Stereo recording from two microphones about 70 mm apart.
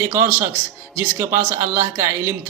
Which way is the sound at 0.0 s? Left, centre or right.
Right.